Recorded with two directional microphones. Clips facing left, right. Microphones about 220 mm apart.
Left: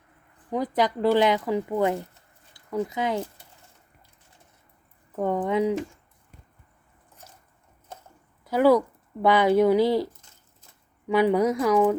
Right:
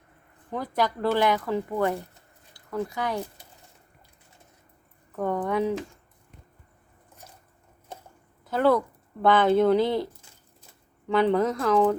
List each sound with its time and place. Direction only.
0.5 s speech: 15° left (ahead or behind)
5.1 s speech: 20° left (ahead or behind)
8.4 s speech: 10° left (ahead or behind)
11.1 s speech: 10° left (ahead or behind)